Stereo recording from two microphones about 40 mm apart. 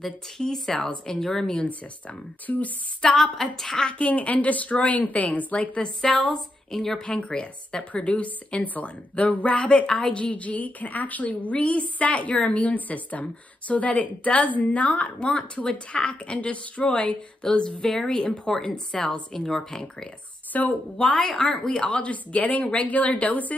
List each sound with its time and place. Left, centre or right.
0.4 s speech: centre
2.4 s speech: left
3.2 s speech: centre
4.0 s a woman's voice: left
5.9 s speech: centre
7.1 s a woman's voice: left
10.3 s a woman's voice: left
17.4 s speech: centre
17.8 s speech: centre
18.1 s speech: left
20.5 s a woman's voice: left
21.0 s speech: centre
21.8 s a woman's voice: left